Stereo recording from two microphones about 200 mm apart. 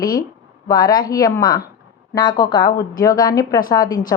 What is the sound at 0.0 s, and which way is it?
Speech, 20° left (ahead or behind).